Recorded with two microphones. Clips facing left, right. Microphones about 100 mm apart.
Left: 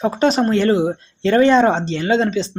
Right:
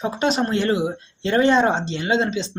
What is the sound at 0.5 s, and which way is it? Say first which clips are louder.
Speech: left 5 dB; 40° left (ahead or behind).